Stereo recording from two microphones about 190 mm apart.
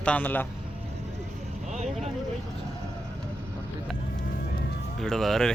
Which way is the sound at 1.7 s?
35° right (ahead or behind).